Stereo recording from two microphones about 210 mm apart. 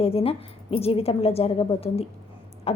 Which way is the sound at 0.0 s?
25° left (ahead or behind).